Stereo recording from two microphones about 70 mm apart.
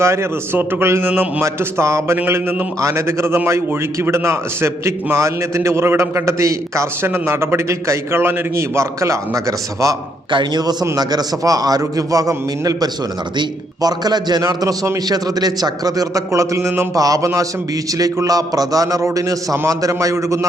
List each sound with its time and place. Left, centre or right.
0.0 s a man's voice: right
7.0 s a man's voice: right
10.5 s a man's voice: right
13.3 s a man's voice: right
17.0 s a man's voice: right